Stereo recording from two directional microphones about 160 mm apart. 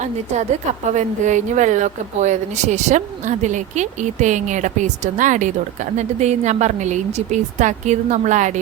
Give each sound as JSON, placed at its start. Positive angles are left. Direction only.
{"t": 0.0, "sound": "a woman's voice", "side_deg": -45}